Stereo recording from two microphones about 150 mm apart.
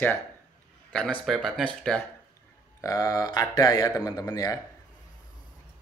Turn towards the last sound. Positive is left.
turn(degrees=25)  # may be behind; listen again after turning